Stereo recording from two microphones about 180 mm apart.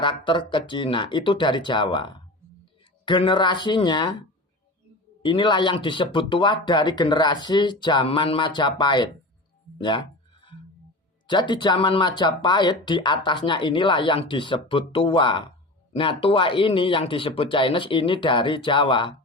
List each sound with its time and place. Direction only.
0.0 s speech: 25° left (ahead or behind)
5.2 s speech: 25° left (ahead or behind)
11.3 s speech: 25° left (ahead or behind)